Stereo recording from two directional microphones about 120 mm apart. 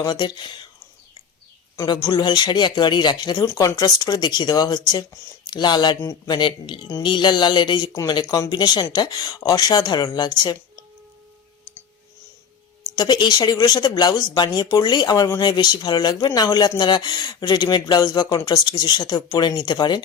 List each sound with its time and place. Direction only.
0.0 s speech: 40° left (ahead or behind)
1.7 s speech: 30° left (ahead or behind)
3.4 s speech: 25° left (ahead or behind)
13.0 s speech: 40° left (ahead or behind)